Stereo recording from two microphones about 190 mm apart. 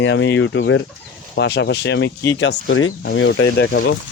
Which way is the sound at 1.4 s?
60° left (ahead or behind).